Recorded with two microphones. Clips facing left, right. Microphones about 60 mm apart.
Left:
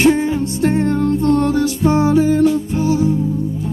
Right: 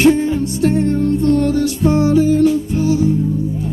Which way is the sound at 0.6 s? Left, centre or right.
Left.